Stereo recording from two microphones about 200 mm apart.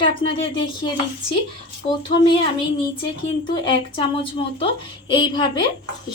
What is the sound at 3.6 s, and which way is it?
Speech, 25° left (ahead or behind).